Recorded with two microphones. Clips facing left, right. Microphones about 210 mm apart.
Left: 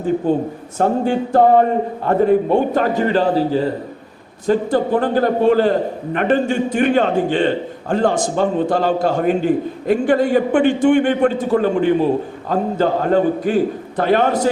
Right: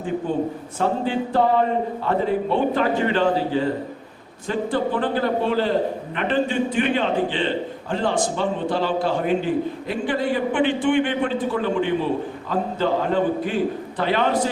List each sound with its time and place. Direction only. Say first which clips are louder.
0.3 s a man's voice: left 5 dB; 40° left (ahead or behind)